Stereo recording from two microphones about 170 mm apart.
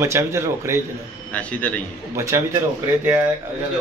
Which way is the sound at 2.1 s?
15° right (ahead or behind).